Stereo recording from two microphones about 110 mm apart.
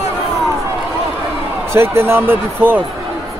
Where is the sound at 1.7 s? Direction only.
20° right (ahead or behind).